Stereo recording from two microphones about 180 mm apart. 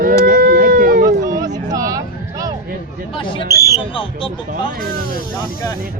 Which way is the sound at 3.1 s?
25° left (ahead or behind).